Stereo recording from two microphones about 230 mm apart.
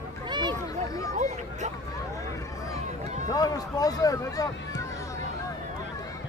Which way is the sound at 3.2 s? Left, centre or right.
Centre.